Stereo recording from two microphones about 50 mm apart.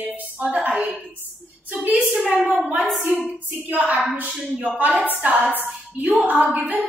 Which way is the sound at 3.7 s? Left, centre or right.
Right.